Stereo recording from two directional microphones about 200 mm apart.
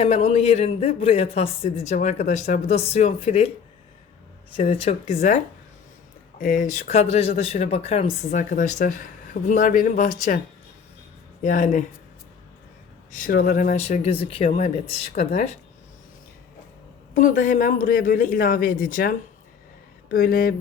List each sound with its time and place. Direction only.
0.0 s a woman's voice: 30° left (ahead or behind)
4.7 s a woman's voice: 30° left (ahead or behind)
6.4 s a woman's voice: 40° left (ahead or behind)
11.4 s a woman's voice: 40° left (ahead or behind)
13.1 s a woman's voice: 40° left (ahead or behind)
17.2 s speech: 40° left (ahead or behind)